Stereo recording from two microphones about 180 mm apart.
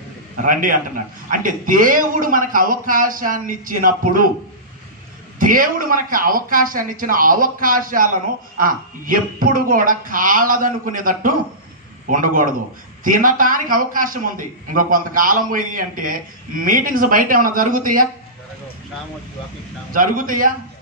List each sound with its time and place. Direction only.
0.4 s a man's voice: 50° right (ahead or behind)
5.4 s a man's voice: 50° right (ahead or behind)
19.9 s a man's voice: 50° right (ahead or behind)